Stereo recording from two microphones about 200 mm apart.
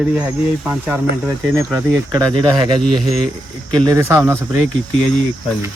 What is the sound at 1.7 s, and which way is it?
Speech, 20° right (ahead or behind).